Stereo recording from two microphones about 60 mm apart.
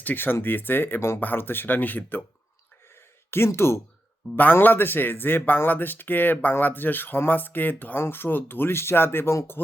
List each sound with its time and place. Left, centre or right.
0.0 s speech: left
3.2 s speech: left
4.4 s speech: left